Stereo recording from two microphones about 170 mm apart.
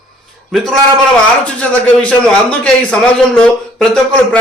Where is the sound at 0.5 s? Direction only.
Centre (ahead or behind).